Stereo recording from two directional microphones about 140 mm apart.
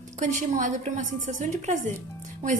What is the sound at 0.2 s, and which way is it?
A woman's voice, 65° right (ahead or behind).